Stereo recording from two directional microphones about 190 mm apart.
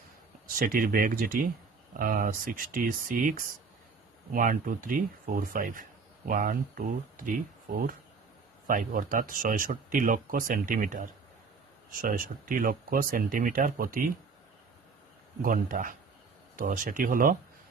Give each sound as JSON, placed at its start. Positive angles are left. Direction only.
{"t": 0.5, "sound": "speech", "side_deg": -50}
{"t": 15.4, "sound": "speech", "side_deg": -45}